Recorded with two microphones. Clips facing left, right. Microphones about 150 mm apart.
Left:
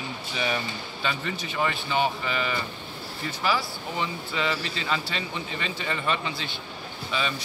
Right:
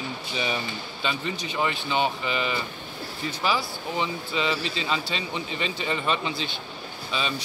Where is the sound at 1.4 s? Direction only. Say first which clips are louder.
Even; 20° right (ahead or behind).